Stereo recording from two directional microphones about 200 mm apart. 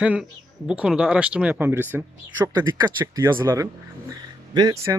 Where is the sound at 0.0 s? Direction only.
5° right (ahead or behind).